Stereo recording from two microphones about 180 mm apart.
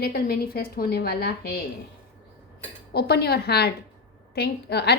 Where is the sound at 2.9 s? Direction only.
60° left (ahead or behind).